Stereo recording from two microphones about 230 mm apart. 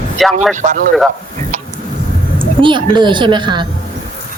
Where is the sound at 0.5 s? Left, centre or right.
Right.